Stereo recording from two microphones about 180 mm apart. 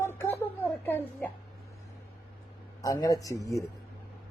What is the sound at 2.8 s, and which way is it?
Speech, 20° left (ahead or behind).